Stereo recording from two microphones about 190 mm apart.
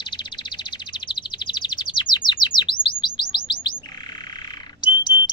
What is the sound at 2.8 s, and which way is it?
Bird, 25° left (ahead or behind).